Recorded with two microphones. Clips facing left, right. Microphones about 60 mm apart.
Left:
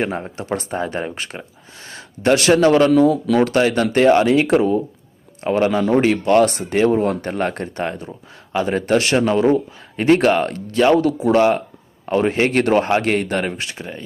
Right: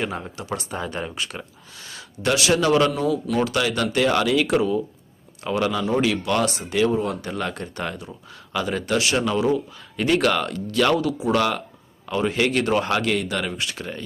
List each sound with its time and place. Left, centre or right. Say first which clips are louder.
0.0 s speech: left 5 dB; left
12.0 s speech: left 5 dB; left